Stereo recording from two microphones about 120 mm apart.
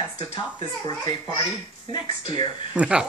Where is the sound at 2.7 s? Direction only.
10° right (ahead or behind).